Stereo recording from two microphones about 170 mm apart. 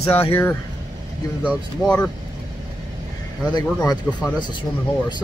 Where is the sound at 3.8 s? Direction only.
25° left (ahead or behind).